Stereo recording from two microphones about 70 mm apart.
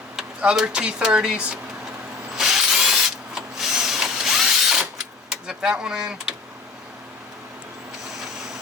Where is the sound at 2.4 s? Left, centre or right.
Centre.